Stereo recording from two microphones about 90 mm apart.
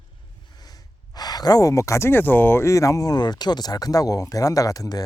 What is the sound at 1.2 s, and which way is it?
Speech, 45° left (ahead or behind).